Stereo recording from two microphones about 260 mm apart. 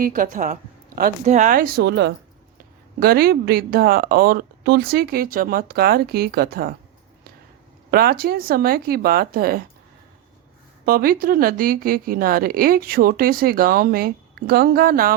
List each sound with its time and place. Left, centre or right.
0.0 s a woman's voice: right
7.9 s a woman's voice: right
10.8 s a woman's voice: right